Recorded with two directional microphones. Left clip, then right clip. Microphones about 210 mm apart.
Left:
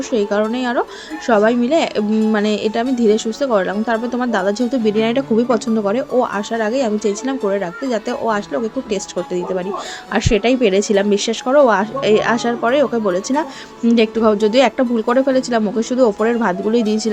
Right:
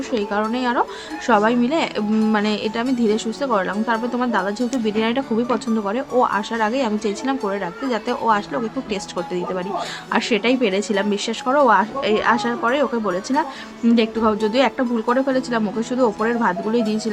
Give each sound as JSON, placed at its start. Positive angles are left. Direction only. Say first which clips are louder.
{"t": 0.1, "sound": "a woman's voice", "louder": "left 5 dB", "side_deg": 15}